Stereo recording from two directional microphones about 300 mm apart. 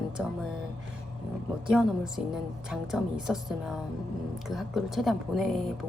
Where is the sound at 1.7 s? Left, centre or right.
Centre.